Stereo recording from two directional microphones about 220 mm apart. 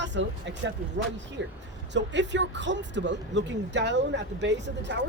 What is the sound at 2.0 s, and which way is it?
Speech, 55° right (ahead or behind).